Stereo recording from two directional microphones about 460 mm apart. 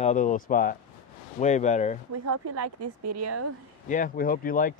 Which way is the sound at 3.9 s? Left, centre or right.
Centre.